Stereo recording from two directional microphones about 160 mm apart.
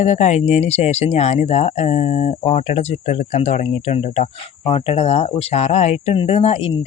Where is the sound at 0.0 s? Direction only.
45° left (ahead or behind).